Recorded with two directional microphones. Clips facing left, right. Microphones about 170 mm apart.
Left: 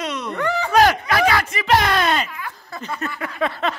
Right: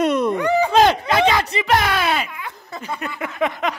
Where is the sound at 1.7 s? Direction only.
5° right (ahead or behind).